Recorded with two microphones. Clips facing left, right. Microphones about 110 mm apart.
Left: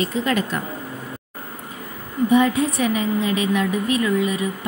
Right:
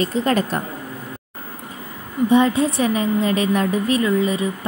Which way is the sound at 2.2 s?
30° right (ahead or behind).